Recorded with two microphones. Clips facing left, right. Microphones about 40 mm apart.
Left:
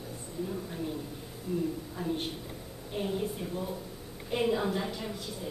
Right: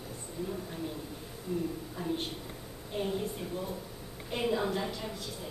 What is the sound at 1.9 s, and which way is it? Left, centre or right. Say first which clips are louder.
A woman's voice: left 1 dB; centre.